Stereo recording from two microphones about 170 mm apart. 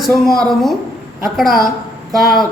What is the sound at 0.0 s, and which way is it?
A woman's voice, centre (ahead or behind).